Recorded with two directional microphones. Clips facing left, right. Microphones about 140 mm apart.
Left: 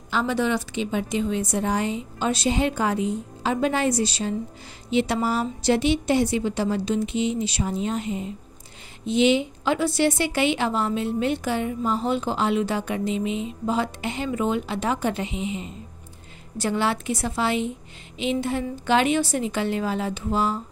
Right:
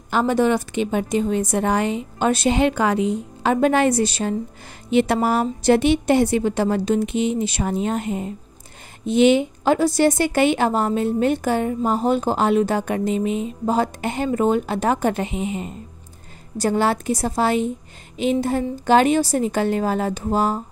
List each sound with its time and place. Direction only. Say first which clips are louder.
0.1 s a woman's voice: right 5 dB; 50° right (ahead or behind)